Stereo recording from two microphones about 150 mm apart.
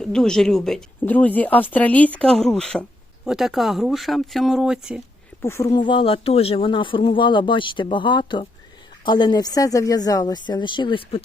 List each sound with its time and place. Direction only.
0.0 s speech: 5° left (ahead or behind)
5.4 s a woman's voice: 20° left (ahead or behind); by 11.2 s 35° left (ahead or behind)